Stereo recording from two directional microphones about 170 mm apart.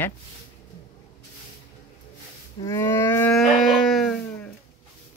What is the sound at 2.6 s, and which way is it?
Cattle, 15° left (ahead or behind).